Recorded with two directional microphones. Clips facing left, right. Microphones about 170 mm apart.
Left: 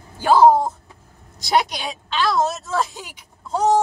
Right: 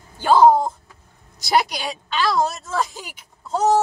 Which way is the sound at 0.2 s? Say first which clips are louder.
Even; 5° left (ahead or behind).